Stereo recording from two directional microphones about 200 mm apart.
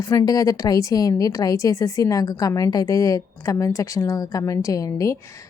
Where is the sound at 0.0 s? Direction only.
15° left (ahead or behind).